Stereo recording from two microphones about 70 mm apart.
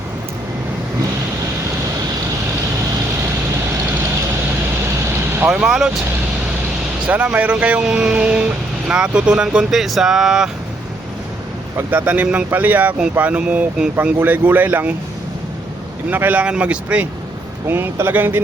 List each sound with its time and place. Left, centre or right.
5.0 s vehicle: right
5.5 s speech: centre
7.1 s speech: right
11.9 s speech: right
14.0 s speech: right
16.0 s speech: right
17.7 s speech: right